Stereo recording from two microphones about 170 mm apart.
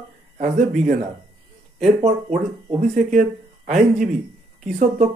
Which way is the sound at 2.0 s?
45° right (ahead or behind).